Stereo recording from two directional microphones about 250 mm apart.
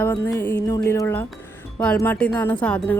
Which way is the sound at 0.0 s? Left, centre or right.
Centre.